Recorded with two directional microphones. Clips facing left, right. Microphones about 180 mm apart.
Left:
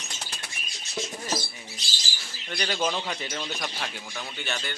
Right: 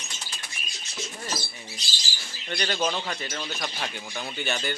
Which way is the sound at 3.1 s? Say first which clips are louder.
Even; 15° left (ahead or behind).